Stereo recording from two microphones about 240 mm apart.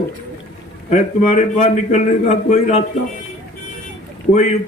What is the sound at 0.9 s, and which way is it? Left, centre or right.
A man's voice, left.